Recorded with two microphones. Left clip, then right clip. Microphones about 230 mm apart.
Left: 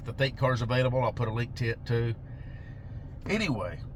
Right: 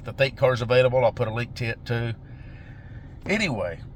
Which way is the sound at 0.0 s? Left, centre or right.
Right.